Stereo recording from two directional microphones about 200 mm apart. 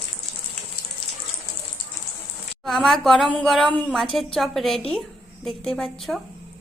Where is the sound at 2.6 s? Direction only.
Centre (ahead or behind).